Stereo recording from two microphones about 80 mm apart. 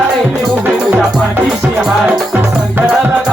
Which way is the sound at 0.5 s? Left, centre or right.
Centre.